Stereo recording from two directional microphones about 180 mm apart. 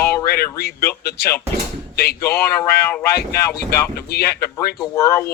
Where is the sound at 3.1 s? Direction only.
60° left (ahead or behind).